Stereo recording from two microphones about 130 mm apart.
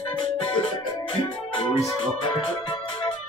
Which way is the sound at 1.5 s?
40° left (ahead or behind).